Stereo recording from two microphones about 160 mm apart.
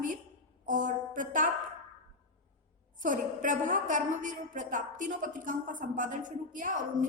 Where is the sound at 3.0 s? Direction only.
55° right (ahead or behind).